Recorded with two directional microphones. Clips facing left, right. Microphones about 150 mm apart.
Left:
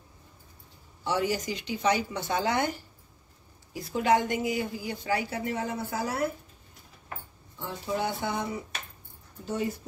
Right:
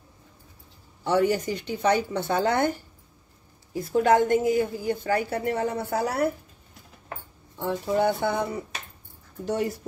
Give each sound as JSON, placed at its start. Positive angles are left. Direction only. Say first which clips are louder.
{"t": 1.0, "sound": "a woman's voice", "louder": "right 6 dB", "side_deg": -55}
{"t": 3.7, "sound": "a woman's voice", "louder": "right 4 dB", "side_deg": -50}
{"t": 7.5, "sound": "speech", "louder": "right 7 dB", "side_deg": -60}
{"t": 9.5, "sound": "speech", "louder": "right 4 dB", "side_deg": -75}